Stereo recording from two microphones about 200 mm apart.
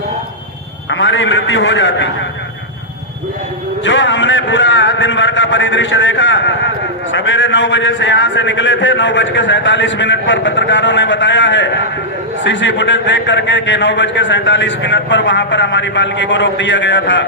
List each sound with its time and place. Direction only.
0.9 s a man's voice: 65° left (ahead or behind)
3.8 s a man's voice: 65° left (ahead or behind)